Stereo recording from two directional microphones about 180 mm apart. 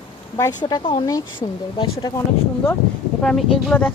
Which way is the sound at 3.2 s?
Centre (ahead or behind).